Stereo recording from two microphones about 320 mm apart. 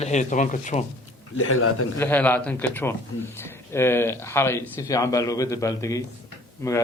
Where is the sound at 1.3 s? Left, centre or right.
Left.